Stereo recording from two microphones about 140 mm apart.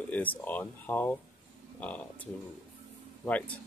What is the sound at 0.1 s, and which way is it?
Speech, 10° left (ahead or behind).